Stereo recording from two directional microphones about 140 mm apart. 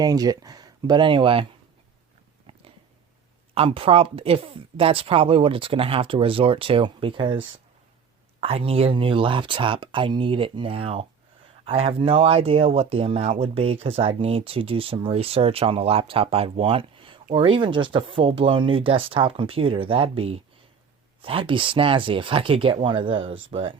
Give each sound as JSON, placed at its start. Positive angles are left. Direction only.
{"t": 0.0, "sound": "speech", "side_deg": -25}
{"t": 3.5, "sound": "speech", "side_deg": -40}